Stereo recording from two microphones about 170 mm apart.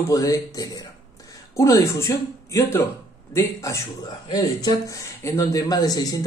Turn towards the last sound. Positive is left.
turn(degrees=20)  # may be behind; listen again after turning